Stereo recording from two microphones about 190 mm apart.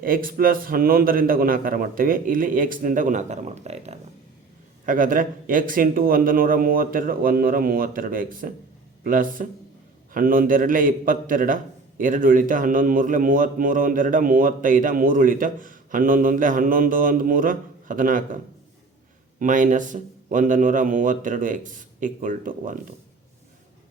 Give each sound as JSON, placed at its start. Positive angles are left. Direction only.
{"t": 0.0, "sound": "a man's voice", "side_deg": -50}
{"t": 4.9, "sound": "a man's voice", "side_deg": -45}
{"t": 19.4, "sound": "a man's voice", "side_deg": -45}